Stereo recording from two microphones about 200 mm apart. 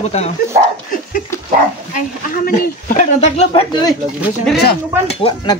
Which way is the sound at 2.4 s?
40° left (ahead or behind).